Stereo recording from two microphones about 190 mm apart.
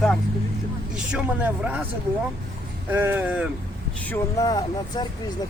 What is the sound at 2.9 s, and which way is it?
Speech, 10° right (ahead or behind).